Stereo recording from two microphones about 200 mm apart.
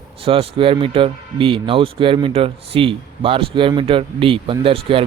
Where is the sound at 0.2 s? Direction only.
30° right (ahead or behind).